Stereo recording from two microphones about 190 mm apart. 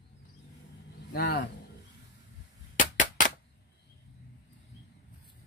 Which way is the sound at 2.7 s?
45° left (ahead or behind).